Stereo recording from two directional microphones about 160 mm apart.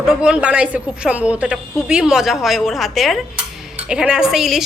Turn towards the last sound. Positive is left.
turn(degrees=0)  # may be behind; listen again after turning